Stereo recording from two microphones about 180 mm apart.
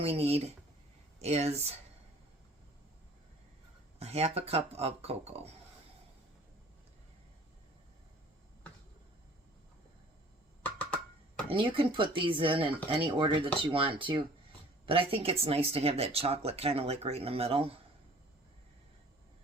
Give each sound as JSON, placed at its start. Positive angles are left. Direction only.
{"t": 0.0, "sound": "speech", "side_deg": -35}
{"t": 4.0, "sound": "speech", "side_deg": -35}
{"t": 10.6, "sound": "a sound", "side_deg": 10}
{"t": 11.4, "sound": "speech", "side_deg": -30}